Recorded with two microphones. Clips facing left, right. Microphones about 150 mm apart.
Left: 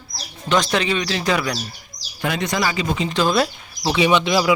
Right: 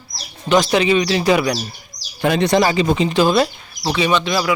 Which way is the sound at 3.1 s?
5° right (ahead or behind).